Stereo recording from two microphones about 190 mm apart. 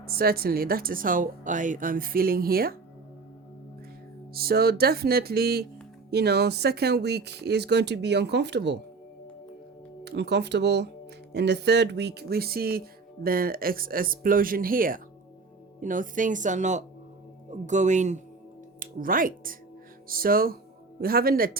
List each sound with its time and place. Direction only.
0.0 s speech: 55° right (ahead or behind)
4.4 s speech: 55° right (ahead or behind)
10.0 s speech: 60° right (ahead or behind)